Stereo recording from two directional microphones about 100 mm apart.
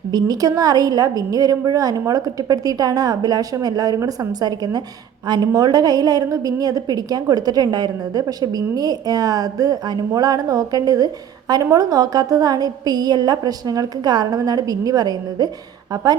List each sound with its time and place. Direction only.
0.1 s a woman's voice: 40° right (ahead or behind)